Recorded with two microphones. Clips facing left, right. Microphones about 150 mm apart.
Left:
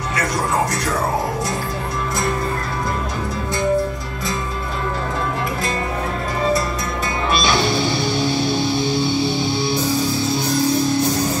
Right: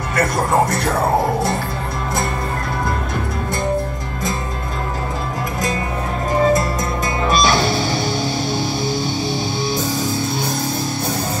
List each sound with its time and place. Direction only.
0.1 s speech: 50° right (ahead or behind)
7.2 s music: 40° right (ahead or behind)